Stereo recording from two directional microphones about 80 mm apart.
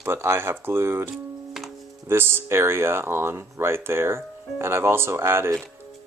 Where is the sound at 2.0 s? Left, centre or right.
Right.